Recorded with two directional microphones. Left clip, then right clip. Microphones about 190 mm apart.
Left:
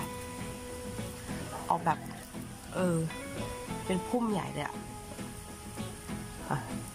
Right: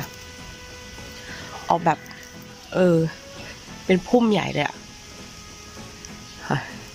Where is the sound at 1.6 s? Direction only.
25° right (ahead or behind).